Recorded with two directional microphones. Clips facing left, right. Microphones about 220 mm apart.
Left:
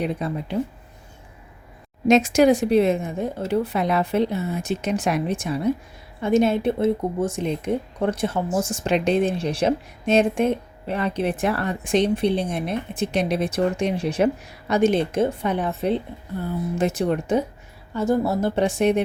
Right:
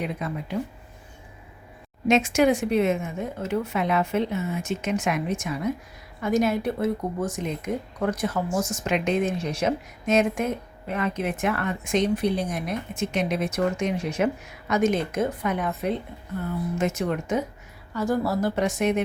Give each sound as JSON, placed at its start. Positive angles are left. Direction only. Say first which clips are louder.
{"t": 0.0, "sound": "speech", "louder": "left 4 dB", "side_deg": 35}
{"t": 2.0, "sound": "speech", "louder": "left 4 dB", "side_deg": 40}